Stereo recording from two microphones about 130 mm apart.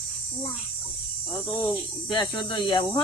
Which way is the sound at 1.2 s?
5° right (ahead or behind).